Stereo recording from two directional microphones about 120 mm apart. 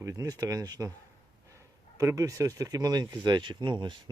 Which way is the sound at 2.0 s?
25° right (ahead or behind).